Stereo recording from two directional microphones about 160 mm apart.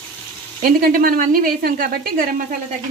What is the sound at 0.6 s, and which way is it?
A woman's voice, 60° right (ahead or behind).